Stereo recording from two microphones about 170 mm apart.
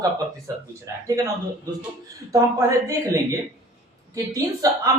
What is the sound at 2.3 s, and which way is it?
Speech, 20° right (ahead or behind).